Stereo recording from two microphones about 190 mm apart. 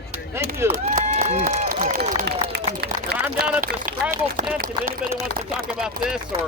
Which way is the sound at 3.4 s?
5° right (ahead or behind).